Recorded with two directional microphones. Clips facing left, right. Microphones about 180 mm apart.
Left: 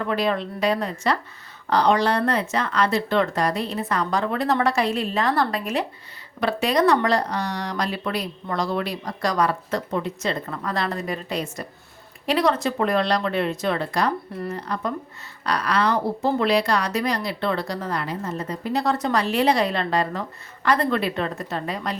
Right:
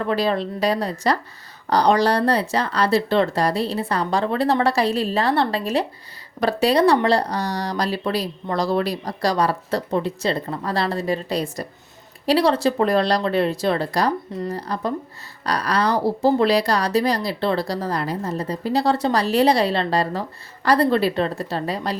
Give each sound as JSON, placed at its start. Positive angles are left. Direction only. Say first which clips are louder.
{"t": 0.1, "sound": "speech", "louder": "right 2 dB", "side_deg": -35}